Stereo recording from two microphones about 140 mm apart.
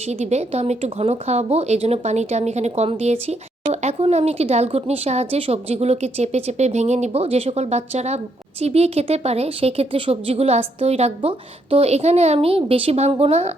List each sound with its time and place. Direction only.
0.1 s speech: 50° right (ahead or behind)